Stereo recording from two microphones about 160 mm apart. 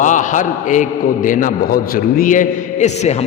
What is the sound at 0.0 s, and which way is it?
A man's voice, 50° left (ahead or behind).